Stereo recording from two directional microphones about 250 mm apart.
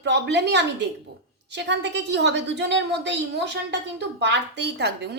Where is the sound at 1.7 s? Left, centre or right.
Right.